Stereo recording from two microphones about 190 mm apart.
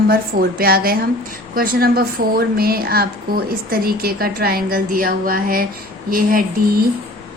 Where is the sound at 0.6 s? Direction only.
50° right (ahead or behind).